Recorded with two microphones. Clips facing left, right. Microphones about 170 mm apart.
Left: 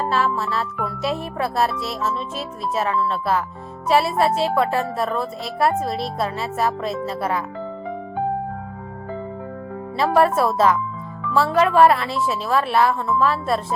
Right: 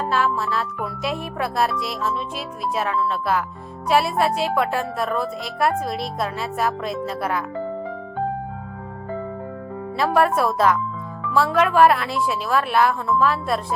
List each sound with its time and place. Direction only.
0.0 s music: centre (ahead or behind)
1.4 s a woman's voice: centre (ahead or behind)
10.0 s a woman's voice: centre (ahead or behind)